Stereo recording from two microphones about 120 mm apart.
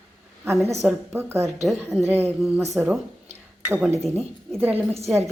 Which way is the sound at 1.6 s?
Centre (ahead or behind).